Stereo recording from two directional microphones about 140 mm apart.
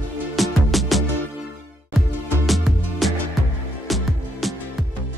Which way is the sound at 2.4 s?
Centre (ahead or behind).